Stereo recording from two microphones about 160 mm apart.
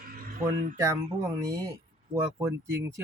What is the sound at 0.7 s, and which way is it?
Speech, 20° right (ahead or behind).